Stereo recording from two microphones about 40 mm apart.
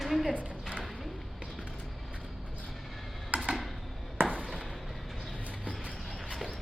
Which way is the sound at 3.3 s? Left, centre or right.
Right.